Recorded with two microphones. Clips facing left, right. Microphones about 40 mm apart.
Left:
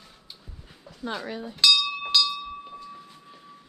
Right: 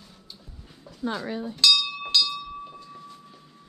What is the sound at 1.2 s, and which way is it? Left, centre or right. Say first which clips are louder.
Chink: left 1 dB; centre.